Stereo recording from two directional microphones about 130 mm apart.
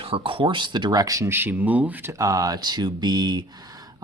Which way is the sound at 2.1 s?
25° right (ahead or behind).